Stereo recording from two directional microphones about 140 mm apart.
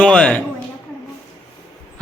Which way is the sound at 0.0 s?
5° left (ahead or behind).